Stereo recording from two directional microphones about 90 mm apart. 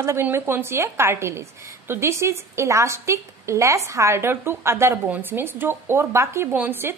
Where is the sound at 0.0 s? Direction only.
30° right (ahead or behind).